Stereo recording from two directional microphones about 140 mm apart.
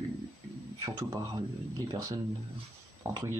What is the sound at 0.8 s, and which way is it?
Speech, 30° right (ahead or behind).